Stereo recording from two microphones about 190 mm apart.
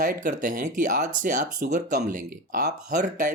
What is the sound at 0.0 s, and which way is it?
Speech, 45° right (ahead or behind).